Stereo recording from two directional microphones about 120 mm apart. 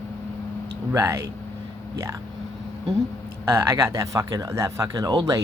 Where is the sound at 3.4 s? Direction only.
20° right (ahead or behind).